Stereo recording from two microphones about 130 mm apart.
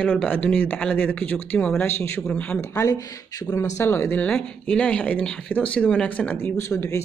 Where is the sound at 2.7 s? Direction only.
25° left (ahead or behind).